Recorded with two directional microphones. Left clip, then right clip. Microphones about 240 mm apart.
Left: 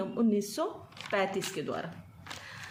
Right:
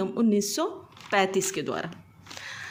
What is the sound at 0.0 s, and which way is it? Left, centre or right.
Speech, right.